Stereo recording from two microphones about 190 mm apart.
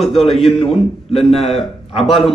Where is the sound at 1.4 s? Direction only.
30° left (ahead or behind).